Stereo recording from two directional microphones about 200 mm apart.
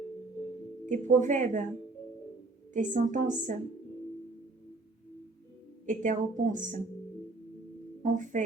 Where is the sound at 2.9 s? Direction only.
40° right (ahead or behind).